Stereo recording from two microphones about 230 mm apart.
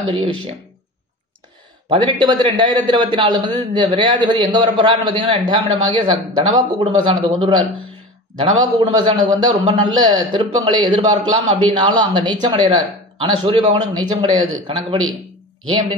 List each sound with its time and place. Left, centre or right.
0.0 s a man's voice: right
1.9 s a man's voice: right
8.7 s a man's voice: right